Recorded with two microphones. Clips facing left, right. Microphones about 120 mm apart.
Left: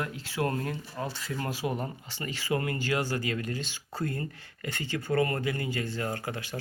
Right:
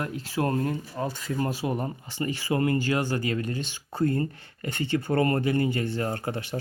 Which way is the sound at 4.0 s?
35° right (ahead or behind).